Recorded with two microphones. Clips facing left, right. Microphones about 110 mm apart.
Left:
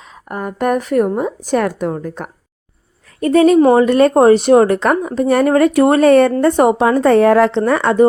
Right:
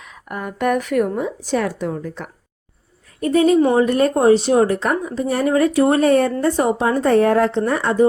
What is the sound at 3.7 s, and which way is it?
A woman's voice, 90° left.